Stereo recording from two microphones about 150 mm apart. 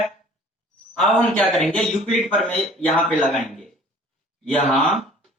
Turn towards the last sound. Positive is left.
turn(degrees=5)  # may be behind; listen again after turning